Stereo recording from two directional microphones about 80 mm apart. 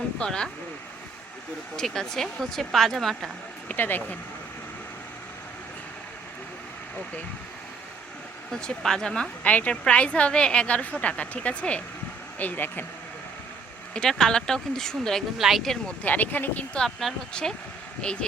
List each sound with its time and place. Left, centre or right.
0.2 s a woman's voice: centre
1.7 s speech: centre
3.7 s speech: left
8.6 s a woman's voice: centre; by 12.8 s left
13.9 s a woman's voice: centre
16.0 s speech: left
16.7 s a woman's voice: centre